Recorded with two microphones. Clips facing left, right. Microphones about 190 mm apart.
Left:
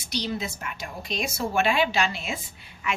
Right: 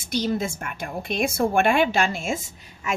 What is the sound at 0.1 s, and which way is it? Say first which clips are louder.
A woman's voice: right 6 dB; 50° right (ahead or behind).